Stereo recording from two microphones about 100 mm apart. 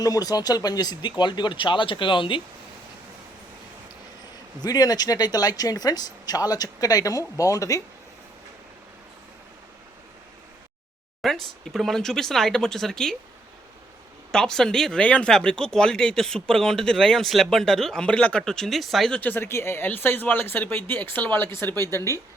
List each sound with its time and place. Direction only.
0.0 s speech: 40° left (ahead or behind); by 2.4 s 55° left (ahead or behind)
4.6 s speech: 40° left (ahead or behind)
11.2 s speech: centre (ahead or behind)
14.3 s speech: 5° left (ahead or behind)
19.2 s speech: 20° left (ahead or behind)